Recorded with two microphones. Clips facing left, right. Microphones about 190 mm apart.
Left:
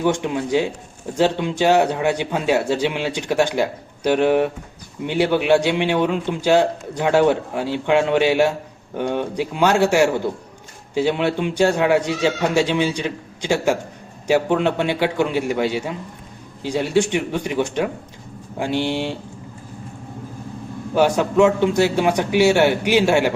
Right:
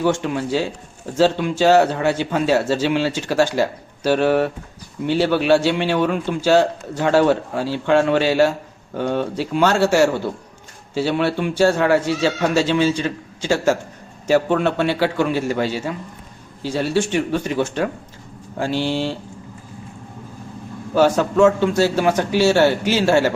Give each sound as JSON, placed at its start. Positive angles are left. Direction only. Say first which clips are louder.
{"t": 0.0, "sound": "a man's voice", "louder": "even", "side_deg": 15}
{"t": 20.9, "sound": "a man's voice", "louder": "right 1 dB", "side_deg": 15}